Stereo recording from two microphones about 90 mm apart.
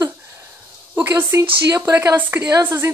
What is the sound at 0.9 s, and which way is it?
Speech, 25° right (ahead or behind).